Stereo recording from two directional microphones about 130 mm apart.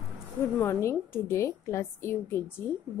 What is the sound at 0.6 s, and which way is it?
A woman's voice, 20° left (ahead or behind).